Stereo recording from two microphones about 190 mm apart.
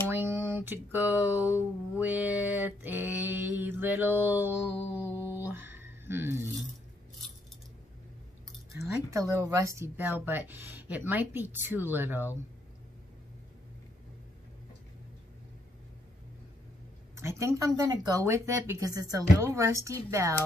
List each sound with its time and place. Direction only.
0.1 s a woman's voice: 10° right (ahead or behind)
4.9 s music: 15° left (ahead or behind)
5.5 s music: 10° right (ahead or behind)
9.1 s a woman's voice: 15° right (ahead or behind)
17.1 s a woman's voice: 15° right (ahead or behind)